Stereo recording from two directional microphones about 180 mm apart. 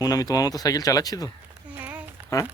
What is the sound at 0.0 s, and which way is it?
Speech, 20° left (ahead or behind).